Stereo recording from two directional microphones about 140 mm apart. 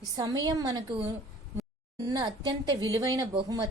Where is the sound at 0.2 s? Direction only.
25° right (ahead or behind).